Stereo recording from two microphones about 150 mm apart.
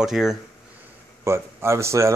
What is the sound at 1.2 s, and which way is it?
Speech, 15° right (ahead or behind).